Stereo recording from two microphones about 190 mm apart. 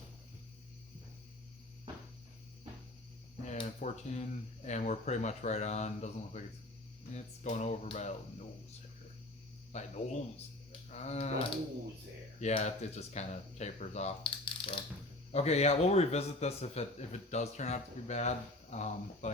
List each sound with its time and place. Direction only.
3.4 s a man's voice: 40° left (ahead or behind)
9.7 s a man's voice: 35° left (ahead or behind)
10.7 s a sound: 35° left (ahead or behind)
12.4 s a man's voice: 35° left (ahead or behind)